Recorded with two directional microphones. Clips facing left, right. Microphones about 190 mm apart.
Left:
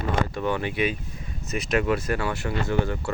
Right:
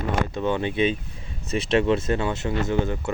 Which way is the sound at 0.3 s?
20° right (ahead or behind).